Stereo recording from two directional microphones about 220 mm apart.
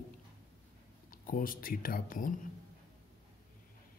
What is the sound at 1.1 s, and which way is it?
Speech, 40° left (ahead or behind).